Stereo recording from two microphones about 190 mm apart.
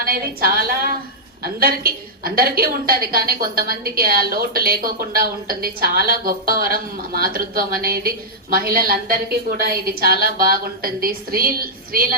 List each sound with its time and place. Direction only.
0.0 s a woman's voice: 50° right (ahead or behind)